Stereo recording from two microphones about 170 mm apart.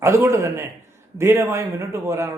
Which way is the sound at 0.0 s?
15° right (ahead or behind).